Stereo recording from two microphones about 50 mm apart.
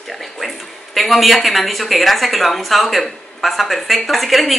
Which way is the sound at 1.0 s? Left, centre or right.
Centre.